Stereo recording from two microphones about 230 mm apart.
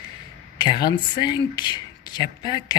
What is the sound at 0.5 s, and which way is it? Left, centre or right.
Speech, centre.